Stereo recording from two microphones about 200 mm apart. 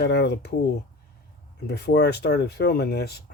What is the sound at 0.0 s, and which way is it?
Speech, 55° left (ahead or behind).